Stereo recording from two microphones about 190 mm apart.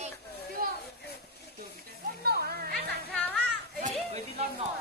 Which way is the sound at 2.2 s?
55° right (ahead or behind).